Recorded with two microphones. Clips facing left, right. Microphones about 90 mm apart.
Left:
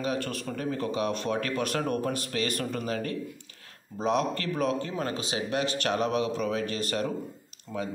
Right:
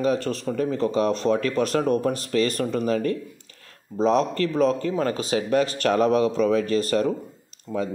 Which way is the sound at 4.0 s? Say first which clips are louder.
Right 7 dB; 35° right (ahead or behind).